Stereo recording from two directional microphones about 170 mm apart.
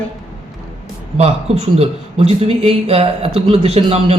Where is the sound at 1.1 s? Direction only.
35° right (ahead or behind).